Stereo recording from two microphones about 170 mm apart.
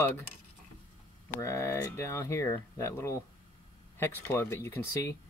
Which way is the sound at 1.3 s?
15° left (ahead or behind).